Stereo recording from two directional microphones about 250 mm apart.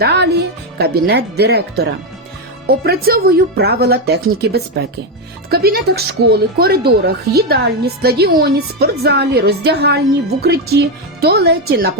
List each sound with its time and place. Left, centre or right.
0.0 s a woman's voice: right